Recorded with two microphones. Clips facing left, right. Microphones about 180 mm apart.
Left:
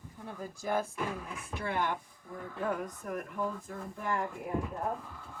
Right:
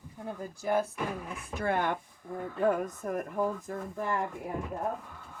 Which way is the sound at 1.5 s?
50° right (ahead or behind).